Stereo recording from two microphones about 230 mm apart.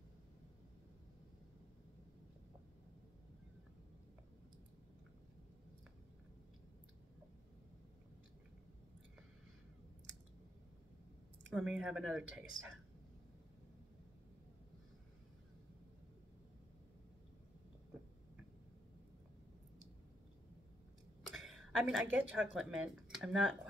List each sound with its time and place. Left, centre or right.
11.5 s speech: centre
21.3 s a woman's voice: centre